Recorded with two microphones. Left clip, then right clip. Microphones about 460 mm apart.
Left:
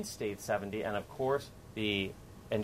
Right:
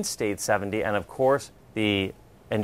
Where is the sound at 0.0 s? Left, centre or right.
Right.